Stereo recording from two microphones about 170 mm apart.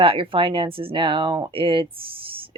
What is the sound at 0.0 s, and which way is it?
Speech, 30° right (ahead or behind).